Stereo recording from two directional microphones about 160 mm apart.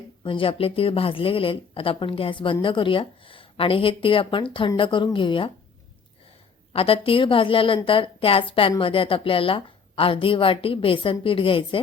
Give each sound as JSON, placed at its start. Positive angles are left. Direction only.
{"t": 0.3, "sound": "speech", "side_deg": 35}
{"t": 6.7, "sound": "speech", "side_deg": 35}